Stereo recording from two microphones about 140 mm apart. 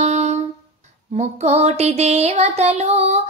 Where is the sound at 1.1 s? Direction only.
50° right (ahead or behind).